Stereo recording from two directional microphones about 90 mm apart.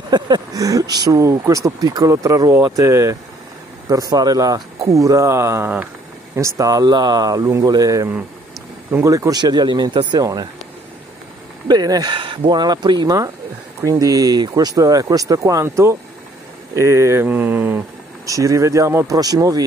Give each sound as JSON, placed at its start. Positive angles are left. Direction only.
{"t": 0.1, "sound": "speech", "side_deg": -45}
{"t": 3.9, "sound": "speech", "side_deg": -45}
{"t": 6.5, "sound": "speech", "side_deg": -40}
{"t": 9.4, "sound": "speech", "side_deg": -50}
{"t": 11.6, "sound": "speech", "side_deg": -50}
{"t": 13.7, "sound": "speech", "side_deg": -40}
{"t": 17.3, "sound": "speech", "side_deg": -20}
{"t": 18.2, "sound": "speech", "side_deg": -40}
{"t": 19.1, "sound": "speech", "side_deg": -45}